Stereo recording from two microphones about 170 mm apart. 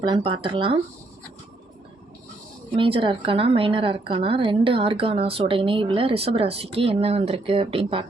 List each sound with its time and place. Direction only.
0.0 s speech: 30° right (ahead or behind)
2.7 s speech: 30° right (ahead or behind)